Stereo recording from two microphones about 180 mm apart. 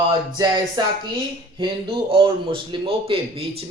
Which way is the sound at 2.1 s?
30° right (ahead or behind).